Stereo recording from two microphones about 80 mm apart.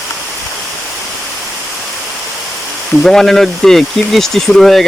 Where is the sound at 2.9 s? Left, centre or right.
Centre.